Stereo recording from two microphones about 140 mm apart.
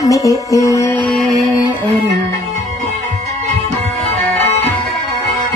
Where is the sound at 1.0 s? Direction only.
Centre (ahead or behind).